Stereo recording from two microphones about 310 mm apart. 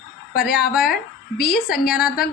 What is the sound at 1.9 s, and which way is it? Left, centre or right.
Speech, centre.